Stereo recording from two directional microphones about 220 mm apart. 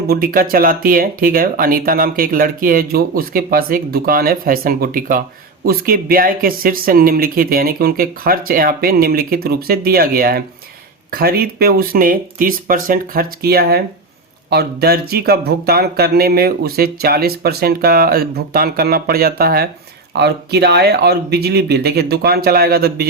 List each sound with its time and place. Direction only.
0.1 s speech: 40° right (ahead or behind)